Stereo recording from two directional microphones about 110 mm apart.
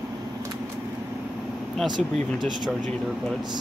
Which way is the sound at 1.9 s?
45° right (ahead or behind).